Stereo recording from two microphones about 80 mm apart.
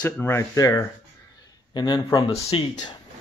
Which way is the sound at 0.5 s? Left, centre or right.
Left.